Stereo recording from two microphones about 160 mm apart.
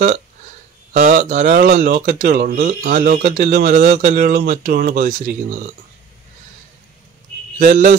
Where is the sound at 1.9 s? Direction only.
75° right (ahead or behind).